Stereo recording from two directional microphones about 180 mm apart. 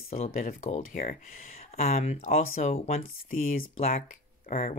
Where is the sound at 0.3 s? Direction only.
50° left (ahead or behind).